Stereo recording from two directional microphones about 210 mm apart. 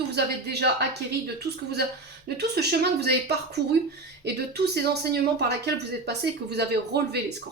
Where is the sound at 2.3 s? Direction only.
50° right (ahead or behind).